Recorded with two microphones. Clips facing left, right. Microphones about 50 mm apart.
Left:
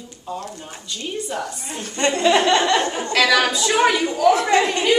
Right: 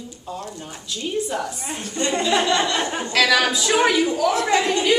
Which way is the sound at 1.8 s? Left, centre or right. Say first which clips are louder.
Left 4 dB; left.